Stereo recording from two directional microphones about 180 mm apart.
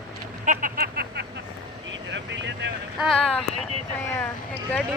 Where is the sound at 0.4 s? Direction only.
50° right (ahead or behind); by 1.3 s 65° right (ahead or behind).